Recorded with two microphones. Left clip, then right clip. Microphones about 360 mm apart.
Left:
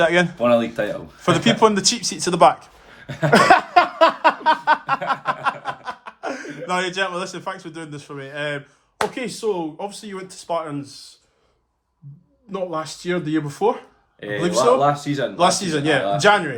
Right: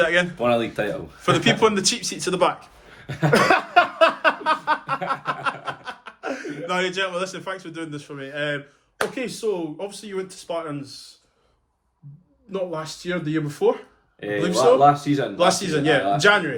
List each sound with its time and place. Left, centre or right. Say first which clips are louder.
0.0 s a man's voice: left 2 dB; centre
0.3 s speech: left 3 dB; centre
1.2 s a man's voice: left 2 dB; centre
3.3 s a sound: left 4 dB; left
5.0 s chuckle: left 3 dB; centre
6.7 s a man's voice: left 2 dB; centre
12.5 s a man's voice: left 2 dB; centre
14.8 s speech: right 2 dB; centre
15.4 s a man's voice: left 2 dB; centre